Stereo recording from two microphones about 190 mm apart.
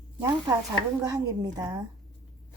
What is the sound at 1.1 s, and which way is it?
Speech, 20° right (ahead or behind).